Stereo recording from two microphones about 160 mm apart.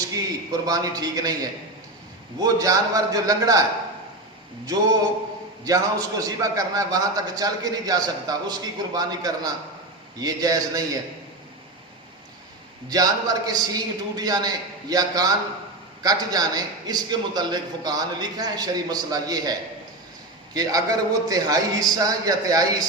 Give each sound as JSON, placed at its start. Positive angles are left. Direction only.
{"t": 0.6, "sound": "a man's voice", "side_deg": -25}
{"t": 2.4, "sound": "a man's voice", "side_deg": -20}
{"t": 12.9, "sound": "a man's voice", "side_deg": -25}